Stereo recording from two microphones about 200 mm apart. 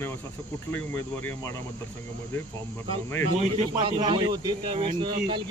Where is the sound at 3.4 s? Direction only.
25° right (ahead or behind).